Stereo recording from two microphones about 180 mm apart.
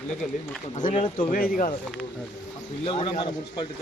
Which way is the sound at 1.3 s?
50° left (ahead or behind).